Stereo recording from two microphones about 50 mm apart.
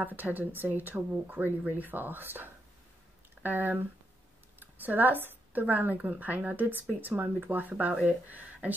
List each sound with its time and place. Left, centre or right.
0.0 s speech: right